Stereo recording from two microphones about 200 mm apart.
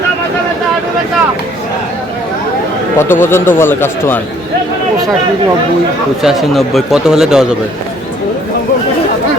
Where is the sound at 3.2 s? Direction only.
10° left (ahead or behind).